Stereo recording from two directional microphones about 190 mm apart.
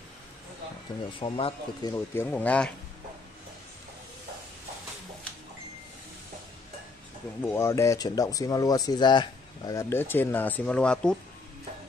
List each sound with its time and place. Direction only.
1.2 s speech: 30° left (ahead or behind)
1.9 s speech: 10° left (ahead or behind)
7.4 s speech: 15° left (ahead or behind)